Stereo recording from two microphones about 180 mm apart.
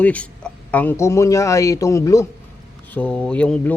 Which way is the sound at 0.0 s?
10° left (ahead or behind).